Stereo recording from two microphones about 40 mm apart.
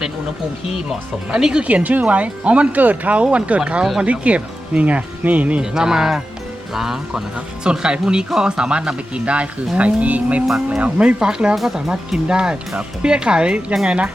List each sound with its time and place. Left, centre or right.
1.3 s speech: centre
1.6 s speech: right
2.7 s speech: right
3.6 s speech: right
5.7 s speech: centre
7.6 s speech: right
11.5 s speech: centre
11.9 s speech: centre